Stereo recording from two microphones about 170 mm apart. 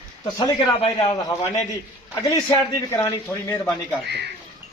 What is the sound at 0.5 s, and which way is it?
Speech, 30° left (ahead or behind).